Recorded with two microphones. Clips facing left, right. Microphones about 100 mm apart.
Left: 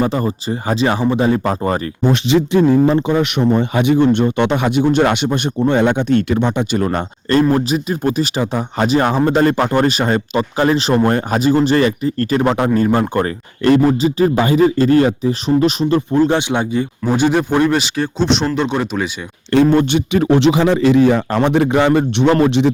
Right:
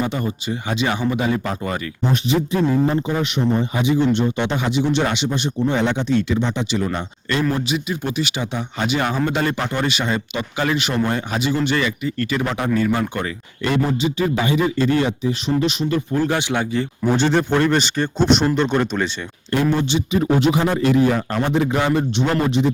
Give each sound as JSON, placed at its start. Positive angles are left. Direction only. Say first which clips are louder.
{"t": 0.0, "sound": "speech", "louder": "left 6 dB", "side_deg": 35}
{"t": 2.1, "sound": "speech", "louder": "left 5 dB", "side_deg": 90}
{"t": 11.0, "sound": "speech", "louder": "left 7 dB", "side_deg": 45}
{"t": 16.2, "sound": "speech", "louder": "left 5 dB", "side_deg": 20}
{"t": 17.1, "sound": "speech", "louder": "left 3 dB", "side_deg": 10}
{"t": 19.7, "sound": "speech", "louder": "left 6 dB", "side_deg": 55}
{"t": 20.2, "sound": "a man's voice", "louder": "left 6 dB", "side_deg": 90}